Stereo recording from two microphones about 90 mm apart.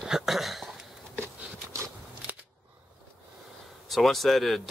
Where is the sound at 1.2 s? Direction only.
30° right (ahead or behind).